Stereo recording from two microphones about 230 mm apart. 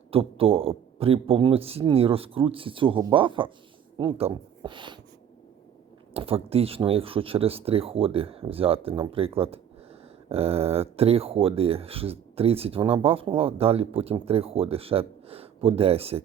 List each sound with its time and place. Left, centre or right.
0.1 s speech: right
6.1 s speech: right